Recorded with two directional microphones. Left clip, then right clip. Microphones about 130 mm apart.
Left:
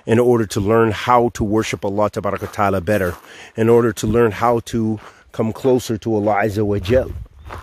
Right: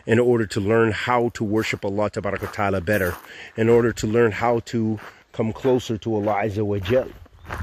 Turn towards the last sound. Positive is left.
turn(degrees=90)